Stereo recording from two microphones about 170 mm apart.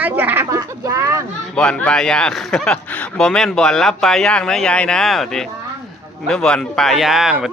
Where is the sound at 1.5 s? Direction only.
5° left (ahead or behind).